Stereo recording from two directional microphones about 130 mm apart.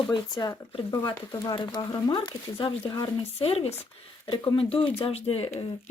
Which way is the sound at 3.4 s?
50° left (ahead or behind).